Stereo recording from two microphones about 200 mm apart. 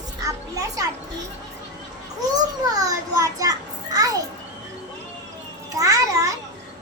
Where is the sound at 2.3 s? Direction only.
20° right (ahead or behind).